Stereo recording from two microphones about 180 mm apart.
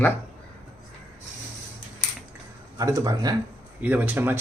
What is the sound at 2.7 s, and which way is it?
Speech, 20° right (ahead or behind).